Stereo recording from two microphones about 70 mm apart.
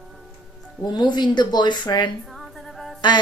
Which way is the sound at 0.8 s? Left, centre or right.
Left.